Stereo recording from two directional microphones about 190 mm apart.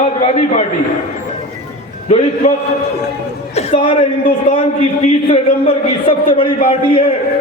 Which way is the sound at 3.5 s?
30° left (ahead or behind).